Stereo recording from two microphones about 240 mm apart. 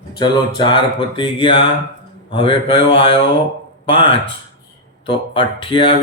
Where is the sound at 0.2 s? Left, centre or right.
Centre.